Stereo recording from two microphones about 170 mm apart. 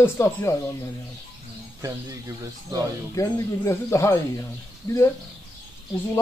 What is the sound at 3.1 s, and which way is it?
Speech, 15° left (ahead or behind).